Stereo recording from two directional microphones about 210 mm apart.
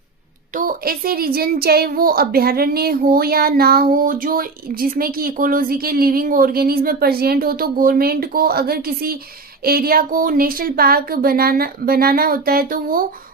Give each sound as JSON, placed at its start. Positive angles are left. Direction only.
{"t": 0.5, "sound": "a woman's voice", "side_deg": -40}